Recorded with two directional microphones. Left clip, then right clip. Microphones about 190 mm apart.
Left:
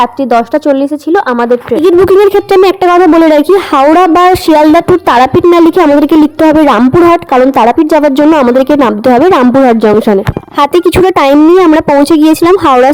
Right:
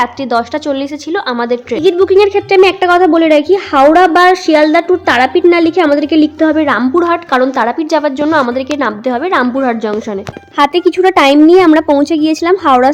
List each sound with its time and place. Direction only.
0.5 s speech: 35° left (ahead or behind)
1.7 s speech: 20° left (ahead or behind)
2.0 s speech: 55° left (ahead or behind)
6.7 s speech: 45° left (ahead or behind)
8.5 s speech: 55° left (ahead or behind)